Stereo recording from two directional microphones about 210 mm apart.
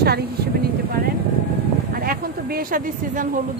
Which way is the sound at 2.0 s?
45° right (ahead or behind).